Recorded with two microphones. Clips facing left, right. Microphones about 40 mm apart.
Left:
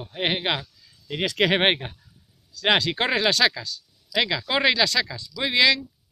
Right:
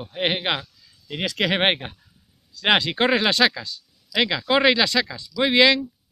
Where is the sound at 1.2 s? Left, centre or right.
Centre.